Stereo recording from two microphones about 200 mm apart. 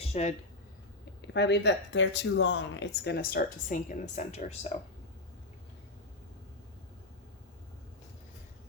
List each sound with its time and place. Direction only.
0.1 s speech: 35° left (ahead or behind)
1.3 s speech: 60° left (ahead or behind); by 4.5 s 35° left (ahead or behind)